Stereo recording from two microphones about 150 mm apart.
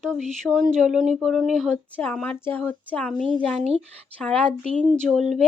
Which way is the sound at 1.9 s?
10° left (ahead or behind).